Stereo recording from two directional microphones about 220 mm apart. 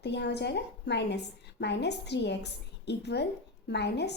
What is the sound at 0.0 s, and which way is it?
A woman's voice, 50° left (ahead or behind).